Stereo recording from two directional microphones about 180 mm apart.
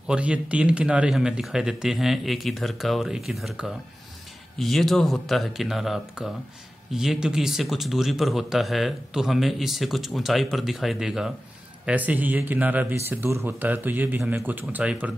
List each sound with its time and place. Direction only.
0.0 s a man's voice: 5° right (ahead or behind)